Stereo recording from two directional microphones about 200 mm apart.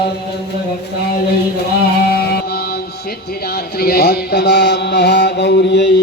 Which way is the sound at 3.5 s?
50° left (ahead or behind).